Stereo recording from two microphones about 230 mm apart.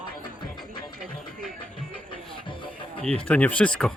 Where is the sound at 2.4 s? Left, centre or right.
Left.